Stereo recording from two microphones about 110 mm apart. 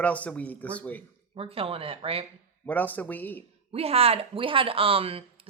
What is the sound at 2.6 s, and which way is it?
Speech, 15° left (ahead or behind).